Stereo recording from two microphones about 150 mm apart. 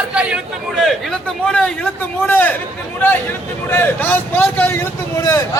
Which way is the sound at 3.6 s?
15° left (ahead or behind).